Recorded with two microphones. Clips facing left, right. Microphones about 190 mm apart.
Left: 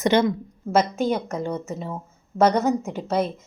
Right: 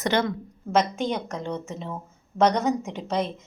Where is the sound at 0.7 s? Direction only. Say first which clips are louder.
Left 3 dB; 5° left (ahead or behind).